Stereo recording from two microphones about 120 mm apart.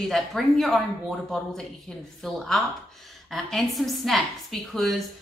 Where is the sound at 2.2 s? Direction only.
5° left (ahead or behind).